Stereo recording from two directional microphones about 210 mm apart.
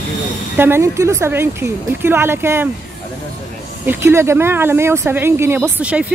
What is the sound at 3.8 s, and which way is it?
Speech, 10° right (ahead or behind).